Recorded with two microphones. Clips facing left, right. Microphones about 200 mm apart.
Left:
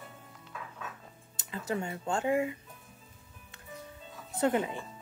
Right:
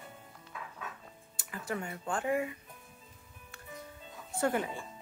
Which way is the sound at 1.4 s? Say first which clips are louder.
Left 3 dB; 25° left (ahead or behind).